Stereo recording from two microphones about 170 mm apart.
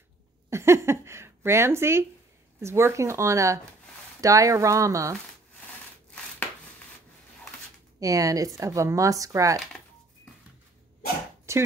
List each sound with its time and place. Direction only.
0.5 s speech: 15° right (ahead or behind)
8.0 s speech: 20° right (ahead or behind)
11.5 s a sound: 15° right (ahead or behind)